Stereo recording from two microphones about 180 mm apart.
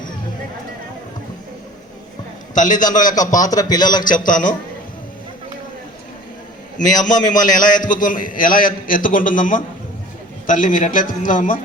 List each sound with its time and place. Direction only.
2.6 s a man's voice: 45° left (ahead or behind)
3.4 s a man's voice: 20° left (ahead or behind)
4.1 s a man's voice: 50° left (ahead or behind)
6.7 s a man's voice: 45° left (ahead or behind)